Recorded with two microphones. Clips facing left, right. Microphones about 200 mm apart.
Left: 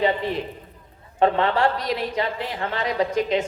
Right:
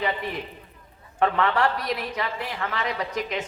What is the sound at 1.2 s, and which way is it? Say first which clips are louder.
A woman's voice: left 3 dB; 30° left (ahead or behind).